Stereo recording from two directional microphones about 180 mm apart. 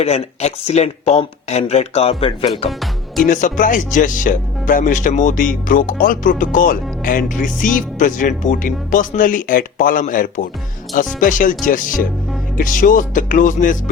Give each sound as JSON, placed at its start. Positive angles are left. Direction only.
{"t": 0.0, "sound": "speech", "side_deg": 35}
{"t": 2.6, "sound": "music", "side_deg": 0}
{"t": 3.2, "sound": "speech", "side_deg": 45}